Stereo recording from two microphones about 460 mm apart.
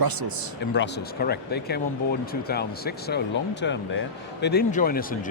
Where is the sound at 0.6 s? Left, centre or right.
Left.